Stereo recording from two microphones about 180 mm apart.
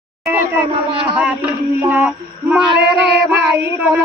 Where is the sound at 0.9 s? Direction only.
30° right (ahead or behind).